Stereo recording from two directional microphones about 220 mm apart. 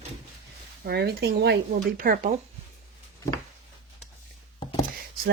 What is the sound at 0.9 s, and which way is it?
Speech, 50° right (ahead or behind).